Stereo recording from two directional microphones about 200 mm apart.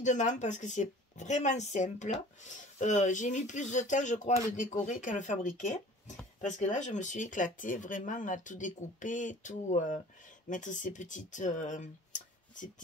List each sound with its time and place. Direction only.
0.0 s speech: 40° left (ahead or behind)